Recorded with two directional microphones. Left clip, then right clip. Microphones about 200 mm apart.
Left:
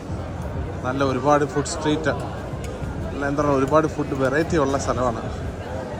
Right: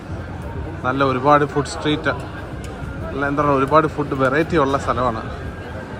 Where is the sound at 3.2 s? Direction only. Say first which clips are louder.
Right 3 dB; 5° left (ahead or behind).